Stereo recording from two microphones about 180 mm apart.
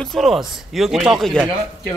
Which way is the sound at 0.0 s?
Centre (ahead or behind).